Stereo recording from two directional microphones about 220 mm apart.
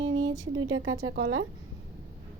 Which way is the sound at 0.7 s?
60° right (ahead or behind).